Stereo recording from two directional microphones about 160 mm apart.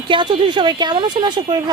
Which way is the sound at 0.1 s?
30° right (ahead or behind).